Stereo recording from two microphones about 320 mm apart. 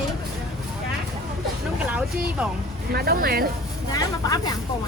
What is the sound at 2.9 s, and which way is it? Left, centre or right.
Speech, right.